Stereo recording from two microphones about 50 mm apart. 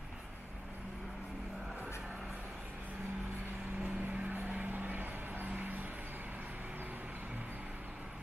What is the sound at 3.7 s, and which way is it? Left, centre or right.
Vehicle, right.